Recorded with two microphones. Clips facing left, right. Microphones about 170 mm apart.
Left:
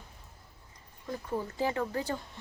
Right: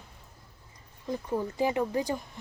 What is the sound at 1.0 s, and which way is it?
A woman's voice, 20° right (ahead or behind).